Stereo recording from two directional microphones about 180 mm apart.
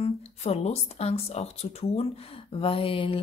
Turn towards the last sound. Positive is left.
turn(degrees=30)  # may be behind; listen again after turning